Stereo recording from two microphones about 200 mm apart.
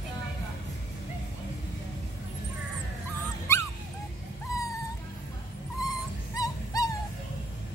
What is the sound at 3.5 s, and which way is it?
Dog, 15° left (ahead or behind).